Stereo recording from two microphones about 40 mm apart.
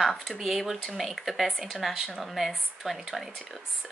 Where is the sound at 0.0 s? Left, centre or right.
Centre.